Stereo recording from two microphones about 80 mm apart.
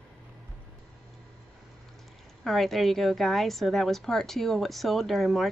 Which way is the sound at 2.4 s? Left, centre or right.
Centre.